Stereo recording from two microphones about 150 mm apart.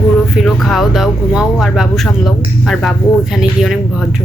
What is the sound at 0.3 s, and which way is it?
Speech, centre (ahead or behind).